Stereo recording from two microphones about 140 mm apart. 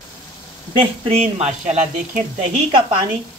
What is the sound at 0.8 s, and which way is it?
Speech, 45° right (ahead or behind).